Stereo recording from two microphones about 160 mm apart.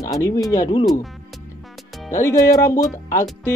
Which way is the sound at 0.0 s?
20° left (ahead or behind).